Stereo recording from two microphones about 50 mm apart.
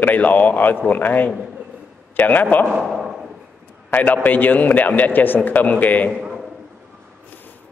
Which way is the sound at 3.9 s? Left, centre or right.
Left.